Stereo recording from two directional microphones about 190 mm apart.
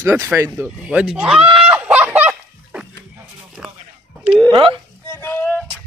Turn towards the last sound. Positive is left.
turn(degrees=10)  # may be behind; listen again after turning